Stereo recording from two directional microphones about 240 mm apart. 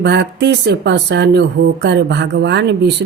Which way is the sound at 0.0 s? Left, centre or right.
Right.